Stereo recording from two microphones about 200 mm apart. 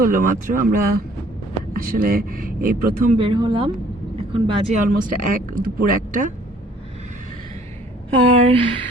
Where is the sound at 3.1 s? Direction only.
25° right (ahead or behind).